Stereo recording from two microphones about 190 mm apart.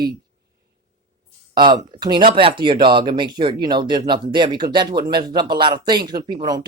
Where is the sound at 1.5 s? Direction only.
25° right (ahead or behind).